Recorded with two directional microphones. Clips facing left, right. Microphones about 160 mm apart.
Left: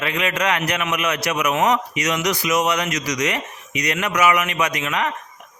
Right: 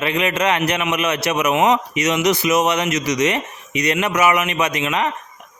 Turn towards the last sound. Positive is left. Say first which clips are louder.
# right 2 dB
turn(degrees=-25)  # may be behind; listen again after turning